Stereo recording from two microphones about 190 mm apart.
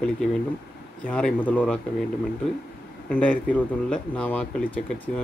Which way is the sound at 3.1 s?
5° left (ahead or behind).